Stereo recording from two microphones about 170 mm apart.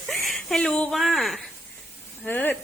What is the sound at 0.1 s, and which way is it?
A woman's voice, centre (ahead or behind).